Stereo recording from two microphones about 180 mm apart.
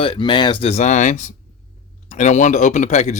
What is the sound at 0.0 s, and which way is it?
Speech, 30° left (ahead or behind).